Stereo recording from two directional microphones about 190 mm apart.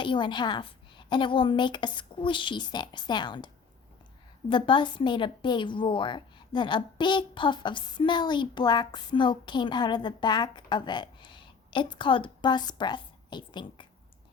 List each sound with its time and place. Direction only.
0.0 s a woman's voice: 25° left (ahead or behind)